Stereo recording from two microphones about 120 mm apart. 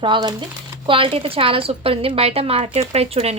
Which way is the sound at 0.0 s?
40° right (ahead or behind).